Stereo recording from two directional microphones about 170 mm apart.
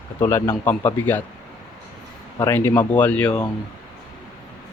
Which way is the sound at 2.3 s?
15° left (ahead or behind).